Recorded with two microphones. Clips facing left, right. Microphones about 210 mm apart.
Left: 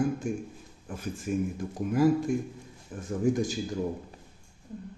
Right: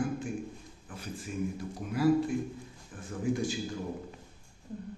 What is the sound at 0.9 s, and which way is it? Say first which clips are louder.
Speech: left 8 dB; 50° left (ahead or behind).